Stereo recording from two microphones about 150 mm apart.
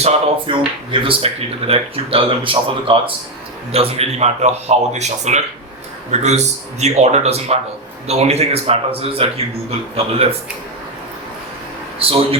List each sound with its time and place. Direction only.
0.0 s speech: 35° right (ahead or behind)
11.9 s speech: 40° right (ahead or behind)